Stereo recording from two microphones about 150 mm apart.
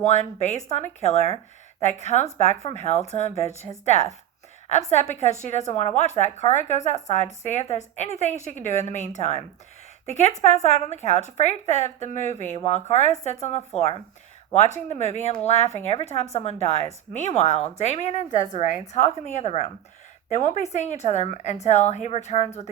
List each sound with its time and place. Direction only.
0.0 s a woman's voice: 50° left (ahead or behind)